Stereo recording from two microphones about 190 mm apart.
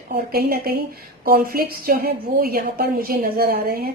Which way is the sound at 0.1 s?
50° right (ahead or behind).